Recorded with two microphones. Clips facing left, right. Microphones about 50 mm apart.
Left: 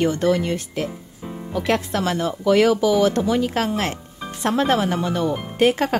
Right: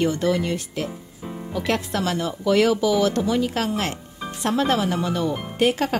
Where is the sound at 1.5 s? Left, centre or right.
Left.